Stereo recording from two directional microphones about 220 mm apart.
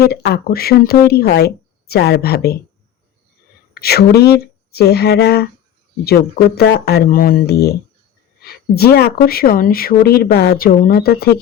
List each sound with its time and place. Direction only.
0.0 s speech: 45° left (ahead or behind)
3.8 s speech: 45° left (ahead or behind)